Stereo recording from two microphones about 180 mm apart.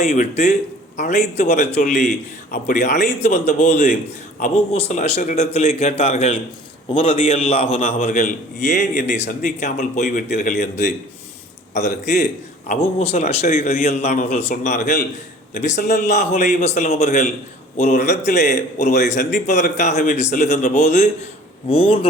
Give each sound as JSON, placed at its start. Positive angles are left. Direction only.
{"t": 0.0, "sound": "a man's voice", "side_deg": 40}
{"t": 12.6, "sound": "a man's voice", "side_deg": 40}